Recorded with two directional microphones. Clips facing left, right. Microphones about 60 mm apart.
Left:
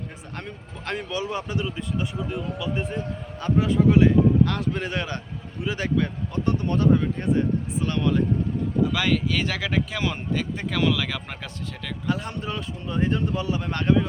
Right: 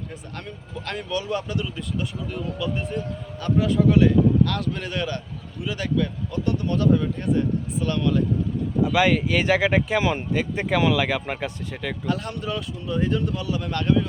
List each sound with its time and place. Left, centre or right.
0.9 s speech: left
8.8 s speech: centre
12.0 s speech: left